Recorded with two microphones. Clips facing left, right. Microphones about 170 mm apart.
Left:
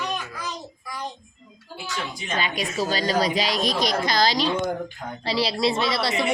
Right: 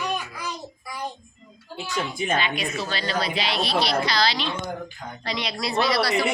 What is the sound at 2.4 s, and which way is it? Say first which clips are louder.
A woman's voice: left 1 dB; 40° left (ahead or behind).